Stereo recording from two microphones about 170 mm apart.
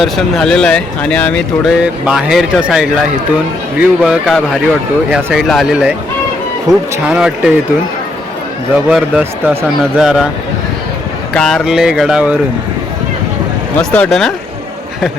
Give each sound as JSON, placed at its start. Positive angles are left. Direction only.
{"t": 0.0, "sound": "speech", "side_deg": 5}
{"t": 1.8, "sound": "speech", "side_deg": -5}
{"t": 6.7, "sound": "speech", "side_deg": -20}
{"t": 7.1, "sound": "speech", "side_deg": -5}
{"t": 8.7, "sound": "speech", "side_deg": -5}
{"t": 11.3, "sound": "speech", "side_deg": 0}
{"t": 13.7, "sound": "speech", "side_deg": 5}